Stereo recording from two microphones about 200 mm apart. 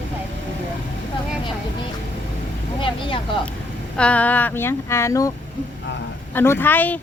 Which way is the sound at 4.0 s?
5° left (ahead or behind).